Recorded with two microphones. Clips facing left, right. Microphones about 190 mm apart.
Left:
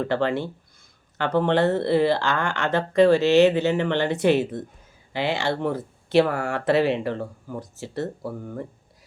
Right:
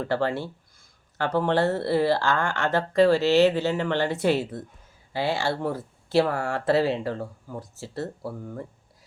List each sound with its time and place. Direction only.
0.0 s speech: 20° left (ahead or behind)